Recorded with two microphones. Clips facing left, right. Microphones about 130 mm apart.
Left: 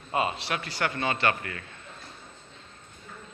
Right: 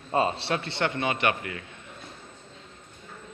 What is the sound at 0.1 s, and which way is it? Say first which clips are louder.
Speech: right 3 dB; 30° right (ahead or behind).